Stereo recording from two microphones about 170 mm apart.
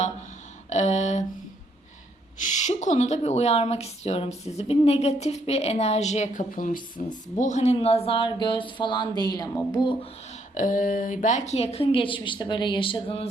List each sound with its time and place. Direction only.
0.7 s a sound: 45° left (ahead or behind)
2.4 s speech: 45° left (ahead or behind); by 10.1 s 30° left (ahead or behind)
10.5 s speech: 50° left (ahead or behind); by 13.2 s 30° left (ahead or behind)